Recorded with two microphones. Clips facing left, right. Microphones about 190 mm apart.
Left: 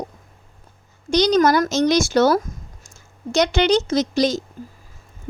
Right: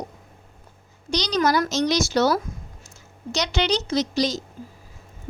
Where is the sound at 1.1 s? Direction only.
50° left (ahead or behind).